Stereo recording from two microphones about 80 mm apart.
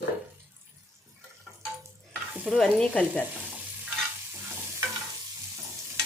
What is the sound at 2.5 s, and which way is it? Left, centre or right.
Speech, centre.